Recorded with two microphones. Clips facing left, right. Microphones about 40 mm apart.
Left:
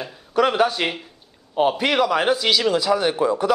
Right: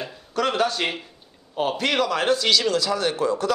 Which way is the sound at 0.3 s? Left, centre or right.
Centre.